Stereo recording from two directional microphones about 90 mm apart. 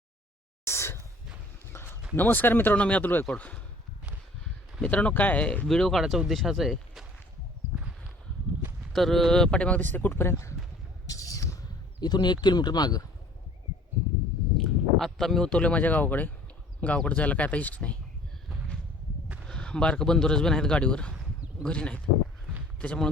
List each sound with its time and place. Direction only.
0.6 s a sound: 30° left (ahead or behind)
2.1 s speech: 20° left (ahead or behind)
4.8 s speech: 15° left (ahead or behind)
5.6 s speech: 5° left (ahead or behind)
8.9 s speech: 5° left (ahead or behind); by 10.5 s 25° left (ahead or behind)
11.0 s a sound: 40° left (ahead or behind)
14.6 s speech: 5° left (ahead or behind)
19.5 s speech: 10° left (ahead or behind)